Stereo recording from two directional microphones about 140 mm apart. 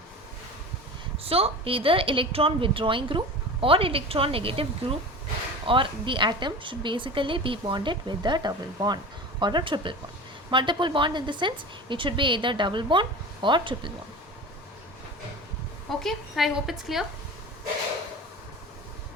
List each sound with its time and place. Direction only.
1.2 s a woman's voice: 45° right (ahead or behind)
15.9 s a woman's voice: centre (ahead or behind)